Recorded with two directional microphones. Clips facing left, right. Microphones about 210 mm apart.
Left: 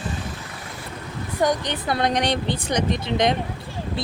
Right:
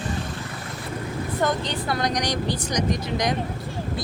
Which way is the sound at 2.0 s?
25° left (ahead or behind).